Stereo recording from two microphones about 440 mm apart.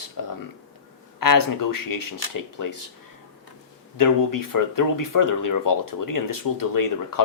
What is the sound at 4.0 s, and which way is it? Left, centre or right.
Speech, left.